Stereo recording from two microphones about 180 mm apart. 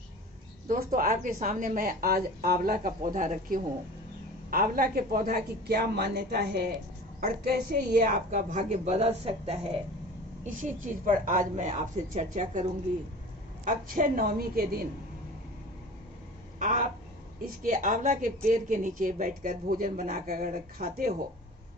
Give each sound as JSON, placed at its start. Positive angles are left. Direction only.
{"t": 0.7, "sound": "a woman's voice", "side_deg": -50}
{"t": 7.2, "sound": "a woman's voice", "side_deg": -55}
{"t": 10.4, "sound": "a woman's voice", "side_deg": -45}
{"t": 13.7, "sound": "speech", "side_deg": -50}
{"t": 16.6, "sound": "a sound", "side_deg": -45}
{"t": 17.4, "sound": "a woman's voice", "side_deg": -50}